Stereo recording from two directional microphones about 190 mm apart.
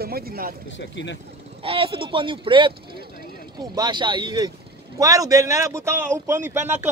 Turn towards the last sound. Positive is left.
turn(degrees=-10)  # may be behind; listen again after turning